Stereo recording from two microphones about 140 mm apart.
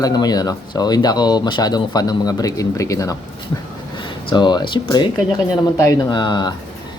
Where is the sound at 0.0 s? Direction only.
30° left (ahead or behind).